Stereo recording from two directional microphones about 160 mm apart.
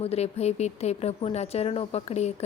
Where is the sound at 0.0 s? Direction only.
40° left (ahead or behind).